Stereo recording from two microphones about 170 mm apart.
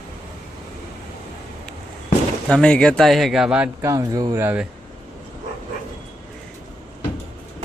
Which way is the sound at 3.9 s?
20° right (ahead or behind).